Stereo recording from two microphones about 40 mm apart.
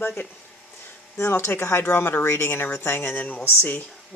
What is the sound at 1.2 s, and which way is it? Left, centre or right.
Speech, left.